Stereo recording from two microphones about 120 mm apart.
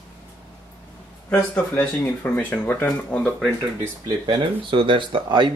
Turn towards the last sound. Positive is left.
turn(degrees=-40)  # may be behind; listen again after turning